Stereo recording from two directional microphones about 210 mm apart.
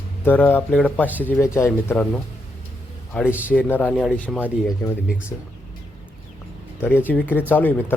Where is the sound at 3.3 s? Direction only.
5° right (ahead or behind).